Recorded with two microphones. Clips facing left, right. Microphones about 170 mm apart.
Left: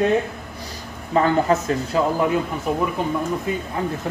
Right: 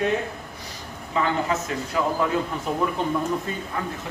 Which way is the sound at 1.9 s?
30° left (ahead or behind).